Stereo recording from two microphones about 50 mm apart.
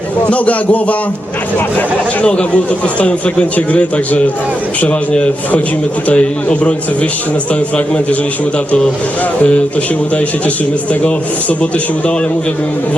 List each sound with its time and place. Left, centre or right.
0.3 s a man's voice: left
2.2 s a man's voice: left
9.4 s a man's voice: left